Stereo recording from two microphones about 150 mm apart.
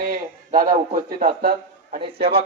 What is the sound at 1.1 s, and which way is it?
Speech, 80° right.